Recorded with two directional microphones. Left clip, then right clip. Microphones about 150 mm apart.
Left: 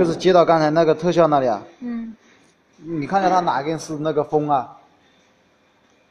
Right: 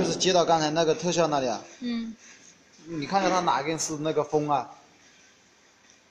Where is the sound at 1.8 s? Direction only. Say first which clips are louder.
Left 2 dB; 5° left (ahead or behind).